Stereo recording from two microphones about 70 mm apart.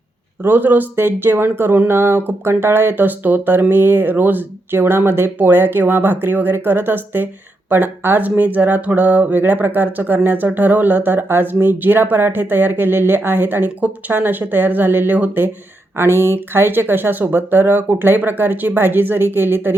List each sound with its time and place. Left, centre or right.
0.4 s speech: right